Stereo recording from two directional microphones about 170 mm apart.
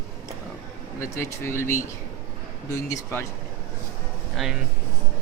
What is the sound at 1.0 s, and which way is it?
Speech, 15° left (ahead or behind).